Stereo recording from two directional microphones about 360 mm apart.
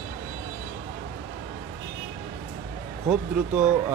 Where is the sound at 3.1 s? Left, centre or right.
Centre.